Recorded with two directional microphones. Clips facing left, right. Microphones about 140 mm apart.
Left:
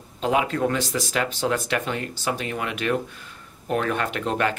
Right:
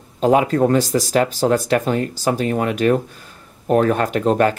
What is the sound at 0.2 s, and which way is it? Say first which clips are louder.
Speech: right 7 dB; 40° right (ahead or behind).